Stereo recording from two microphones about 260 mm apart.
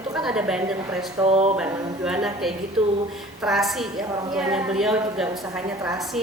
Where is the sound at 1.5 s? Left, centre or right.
Centre.